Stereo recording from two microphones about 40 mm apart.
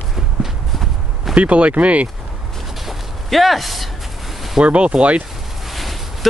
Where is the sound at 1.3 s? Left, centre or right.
Right.